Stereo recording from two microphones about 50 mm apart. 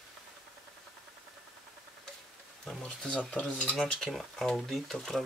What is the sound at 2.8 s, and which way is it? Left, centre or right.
Speech, centre.